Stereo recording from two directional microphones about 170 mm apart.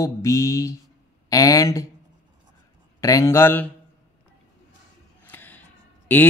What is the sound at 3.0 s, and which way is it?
Speech, 20° left (ahead or behind).